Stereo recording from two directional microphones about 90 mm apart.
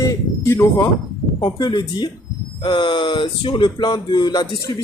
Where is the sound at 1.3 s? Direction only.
50° left (ahead or behind).